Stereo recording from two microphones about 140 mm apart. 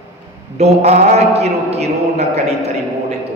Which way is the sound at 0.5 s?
50° right (ahead or behind).